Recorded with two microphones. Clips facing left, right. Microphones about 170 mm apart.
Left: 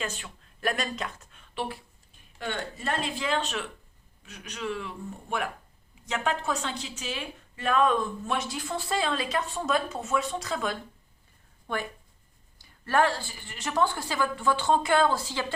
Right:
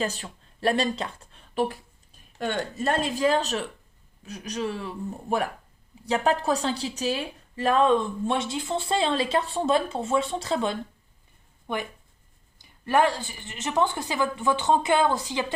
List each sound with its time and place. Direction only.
0.0 s a woman's voice: 35° right (ahead or behind); by 15.5 s 15° right (ahead or behind)